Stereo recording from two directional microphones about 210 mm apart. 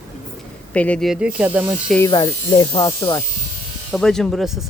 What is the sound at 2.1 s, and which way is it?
Speech, 25° left (ahead or behind).